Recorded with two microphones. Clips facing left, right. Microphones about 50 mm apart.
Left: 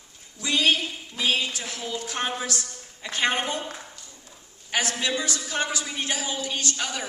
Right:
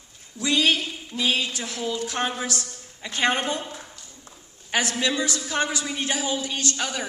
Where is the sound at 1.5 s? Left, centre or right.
Right.